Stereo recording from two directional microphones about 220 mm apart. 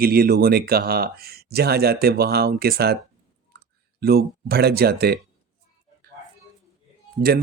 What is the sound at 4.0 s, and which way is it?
Speech, 45° right (ahead or behind).